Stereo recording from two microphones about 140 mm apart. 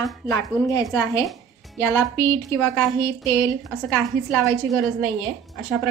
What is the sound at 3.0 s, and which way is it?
Speech, 30° left (ahead or behind).